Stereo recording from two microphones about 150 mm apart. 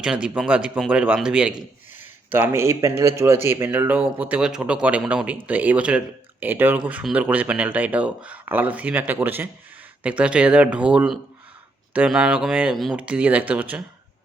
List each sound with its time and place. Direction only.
0.0 s speech: 5° right (ahead or behind)